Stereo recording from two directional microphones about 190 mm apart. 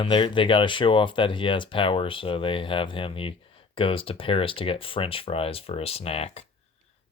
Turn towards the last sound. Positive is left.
turn(degrees=30)  # may be behind; listen again after turning